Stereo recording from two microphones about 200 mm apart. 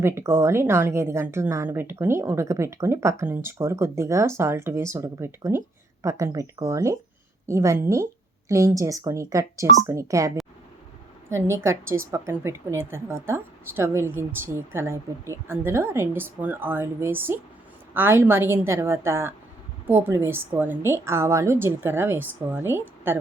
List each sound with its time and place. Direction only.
0.0 s a woman's voice: 15° right (ahead or behind)